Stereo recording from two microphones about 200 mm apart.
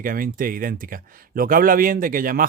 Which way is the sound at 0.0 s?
45° right (ahead or behind).